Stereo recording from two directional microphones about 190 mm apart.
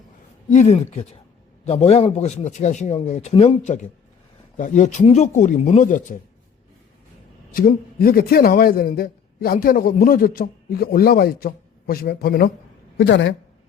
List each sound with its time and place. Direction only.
0.5 s speech: 35° left (ahead or behind)
7.5 s a man's voice: 50° left (ahead or behind)
13.0 s a woman's voice: 70° left (ahead or behind)